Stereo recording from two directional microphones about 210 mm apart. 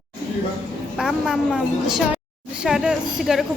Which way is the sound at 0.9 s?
Centre (ahead or behind).